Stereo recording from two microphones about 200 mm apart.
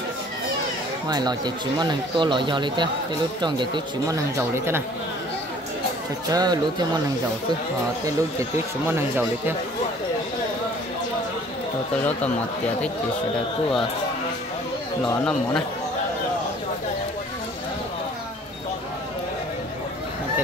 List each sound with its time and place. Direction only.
1.0 s speech: 20° right (ahead or behind)
6.3 s speech: 20° right (ahead or behind)
8.0 s speech: 15° right (ahead or behind)